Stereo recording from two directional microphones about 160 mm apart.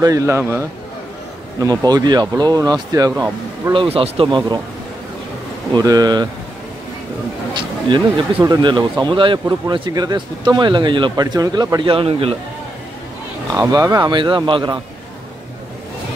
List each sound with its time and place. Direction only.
0.0 s a man's voice: 20° right (ahead or behind)
3.7 s speech: 35° right (ahead or behind)
5.8 s speech: 25° right (ahead or behind)
7.5 s speech: 30° right (ahead or behind)
13.6 s speech: 20° right (ahead or behind)